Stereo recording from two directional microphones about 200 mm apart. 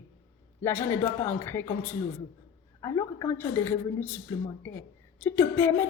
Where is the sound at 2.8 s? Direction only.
15° left (ahead or behind).